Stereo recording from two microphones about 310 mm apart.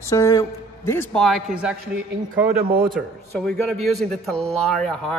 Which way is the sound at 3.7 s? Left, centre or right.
Centre.